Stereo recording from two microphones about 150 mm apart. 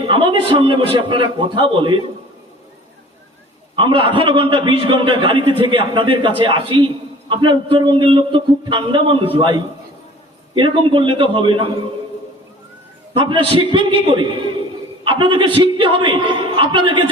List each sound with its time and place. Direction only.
0.0 s a man's voice: 35° right (ahead or behind)
3.8 s a man's voice: 35° right (ahead or behind)
13.1 s a man's voice: 35° right (ahead or behind)